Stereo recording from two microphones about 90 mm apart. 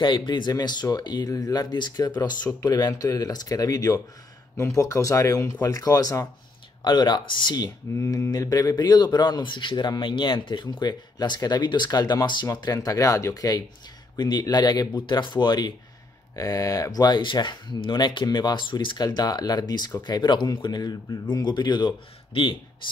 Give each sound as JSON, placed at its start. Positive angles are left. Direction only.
{"t": 0.0, "sound": "speech", "side_deg": 60}
{"t": 6.8, "sound": "speech", "side_deg": 55}
{"t": 7.9, "sound": "speech", "side_deg": 35}
{"t": 16.3, "sound": "speech", "side_deg": 40}
{"t": 17.2, "sound": "speech", "side_deg": 60}
{"t": 19.0, "sound": "speech", "side_deg": 50}
{"t": 22.3, "sound": "speech", "side_deg": 75}